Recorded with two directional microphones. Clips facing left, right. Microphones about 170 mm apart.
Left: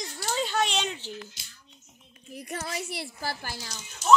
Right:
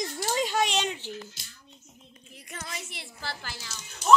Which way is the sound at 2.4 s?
40° left (ahead or behind).